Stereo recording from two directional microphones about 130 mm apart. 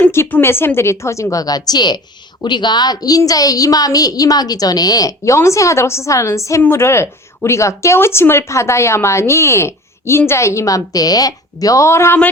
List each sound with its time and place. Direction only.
0.0 s speech: 15° left (ahead or behind)